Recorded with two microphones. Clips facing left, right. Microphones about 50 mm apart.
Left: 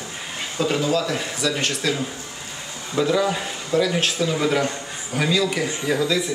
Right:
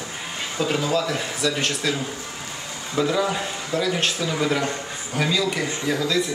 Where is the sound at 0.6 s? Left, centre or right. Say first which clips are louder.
Left 1 dB; centre.